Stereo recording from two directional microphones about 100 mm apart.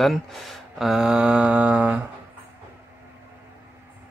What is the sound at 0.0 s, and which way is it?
Speech, centre (ahead or behind).